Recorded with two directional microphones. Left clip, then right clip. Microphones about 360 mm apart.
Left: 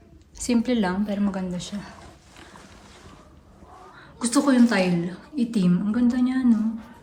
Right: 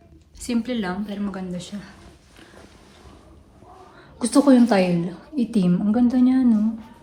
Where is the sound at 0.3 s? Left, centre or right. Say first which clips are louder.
Left 3 dB; centre.